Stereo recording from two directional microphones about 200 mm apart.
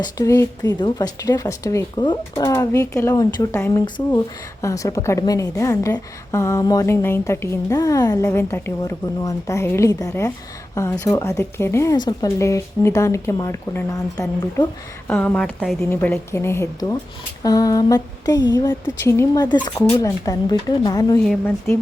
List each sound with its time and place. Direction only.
0.0 s a woman's voice: 15° left (ahead or behind)